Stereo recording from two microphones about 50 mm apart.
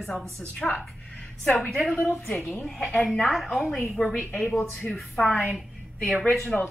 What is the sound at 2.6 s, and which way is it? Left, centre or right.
A woman's voice, centre.